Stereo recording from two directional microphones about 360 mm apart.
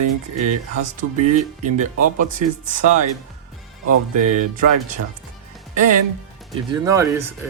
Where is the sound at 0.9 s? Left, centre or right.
Centre.